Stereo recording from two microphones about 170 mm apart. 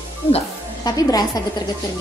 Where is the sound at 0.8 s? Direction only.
20° left (ahead or behind).